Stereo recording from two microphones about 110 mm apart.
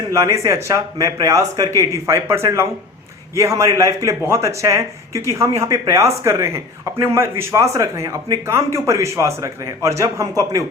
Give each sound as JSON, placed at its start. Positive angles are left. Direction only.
{"t": 0.1, "sound": "speech", "side_deg": -30}